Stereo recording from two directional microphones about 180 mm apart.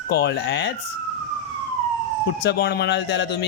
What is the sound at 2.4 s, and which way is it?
A man's voice, 65° left (ahead or behind).